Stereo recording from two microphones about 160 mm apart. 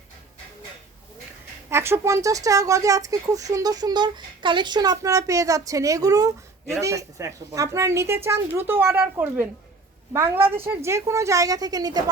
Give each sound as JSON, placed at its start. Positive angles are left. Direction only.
{"t": 1.7, "sound": "a woman's voice", "side_deg": -15}